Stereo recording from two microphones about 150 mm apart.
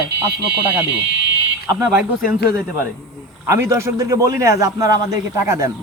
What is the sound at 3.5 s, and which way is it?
Speech, 20° right (ahead or behind).